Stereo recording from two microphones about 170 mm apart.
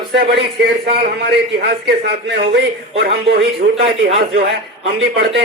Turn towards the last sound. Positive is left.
turn(degrees=-70)  # may be behind; listen again after turning